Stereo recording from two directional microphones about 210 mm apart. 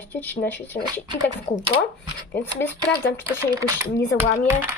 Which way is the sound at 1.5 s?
35° left (ahead or behind).